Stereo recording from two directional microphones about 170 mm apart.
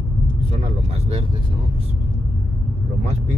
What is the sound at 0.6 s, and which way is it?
Speech, 40° right (ahead or behind).